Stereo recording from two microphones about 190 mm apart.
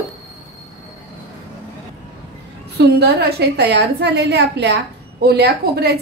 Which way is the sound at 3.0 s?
55° right (ahead or behind).